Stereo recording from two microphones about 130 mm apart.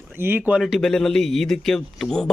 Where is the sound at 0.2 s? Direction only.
15° right (ahead or behind).